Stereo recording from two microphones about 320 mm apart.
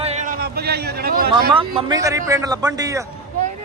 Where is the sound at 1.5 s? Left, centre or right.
Centre.